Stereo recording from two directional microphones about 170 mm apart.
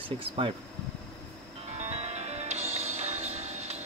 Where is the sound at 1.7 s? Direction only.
40° right (ahead or behind).